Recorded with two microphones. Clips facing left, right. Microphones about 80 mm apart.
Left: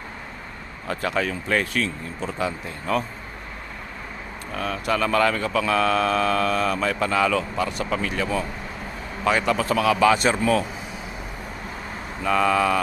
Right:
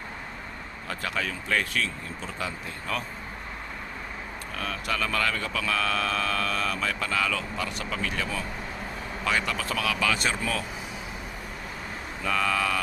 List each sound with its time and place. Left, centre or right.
0.9 s speech: left
4.5 s speech: left
12.2 s speech: left